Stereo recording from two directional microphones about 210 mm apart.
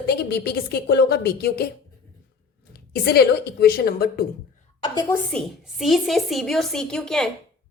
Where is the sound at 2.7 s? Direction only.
50° left (ahead or behind).